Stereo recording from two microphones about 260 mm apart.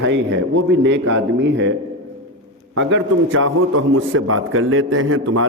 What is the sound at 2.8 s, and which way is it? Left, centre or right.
A man's voice, right.